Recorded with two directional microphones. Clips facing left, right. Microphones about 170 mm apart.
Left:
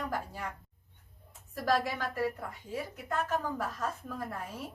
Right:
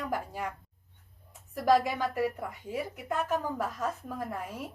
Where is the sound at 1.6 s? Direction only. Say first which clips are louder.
Right 5 dB; 15° right (ahead or behind).